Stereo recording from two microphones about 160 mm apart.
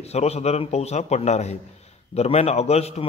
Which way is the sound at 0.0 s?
40° left (ahead or behind).